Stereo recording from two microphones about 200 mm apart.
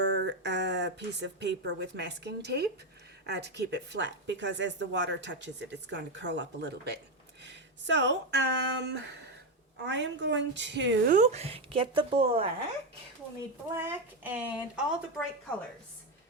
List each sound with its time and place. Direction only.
0.0 s a woman's voice: 60° right (ahead or behind)
11.1 s a woman's voice: 35° right (ahead or behind)
13.7 s speech: 10° right (ahead or behind)